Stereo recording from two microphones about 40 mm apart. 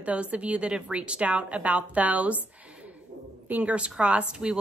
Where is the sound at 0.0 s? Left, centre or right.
Right.